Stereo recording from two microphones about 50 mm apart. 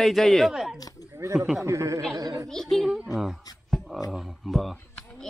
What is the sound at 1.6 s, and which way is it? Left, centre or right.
Speech, right.